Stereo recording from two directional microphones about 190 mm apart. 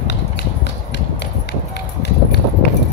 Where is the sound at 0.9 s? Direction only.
65° left (ahead or behind).